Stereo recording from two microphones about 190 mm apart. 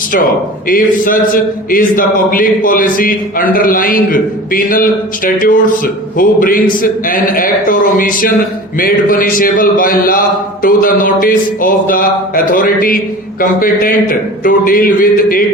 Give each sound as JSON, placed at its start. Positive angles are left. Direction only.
{"t": 0.7, "sound": "a man's voice", "side_deg": 45}